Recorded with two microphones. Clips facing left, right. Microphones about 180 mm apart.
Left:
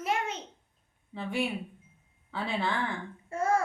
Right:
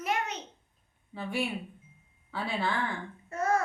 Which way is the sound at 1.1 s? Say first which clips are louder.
Left 1 dB; 20° left (ahead or behind).